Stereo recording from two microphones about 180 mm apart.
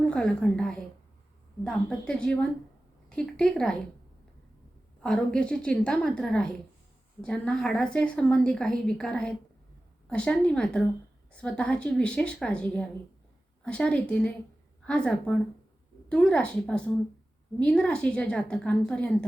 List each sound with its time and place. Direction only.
0.0 s a woman's voice: 5° left (ahead or behind)
5.0 s a woman's voice: 5° left (ahead or behind)